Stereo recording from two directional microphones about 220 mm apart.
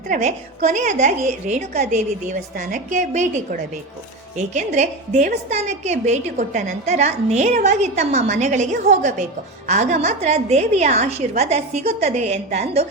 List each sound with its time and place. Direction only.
0.1 s a woman's voice: 30° right (ahead or behind)